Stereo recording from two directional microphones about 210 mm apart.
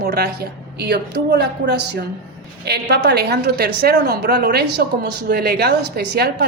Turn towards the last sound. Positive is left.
turn(degrees=-50)  # may be behind; listen again after turning